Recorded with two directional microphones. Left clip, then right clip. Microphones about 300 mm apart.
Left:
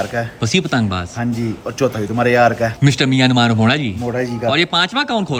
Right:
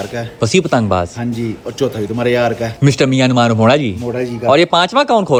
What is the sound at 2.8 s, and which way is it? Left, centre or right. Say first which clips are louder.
A man's voice: right 4 dB; centre.